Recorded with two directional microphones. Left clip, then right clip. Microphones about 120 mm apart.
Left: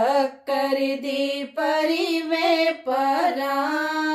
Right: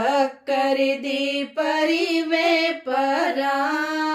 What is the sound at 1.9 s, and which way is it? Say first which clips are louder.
Music: right 2 dB; 15° right (ahead or behind).